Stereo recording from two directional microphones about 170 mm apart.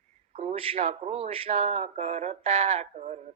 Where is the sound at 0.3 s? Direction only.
35° right (ahead or behind).